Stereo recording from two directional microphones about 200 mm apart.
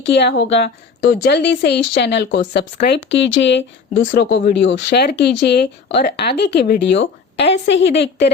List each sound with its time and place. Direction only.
0.0 s speech: 60° left (ahead or behind)